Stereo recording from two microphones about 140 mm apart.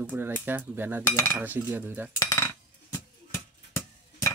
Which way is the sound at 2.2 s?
25° left (ahead or behind).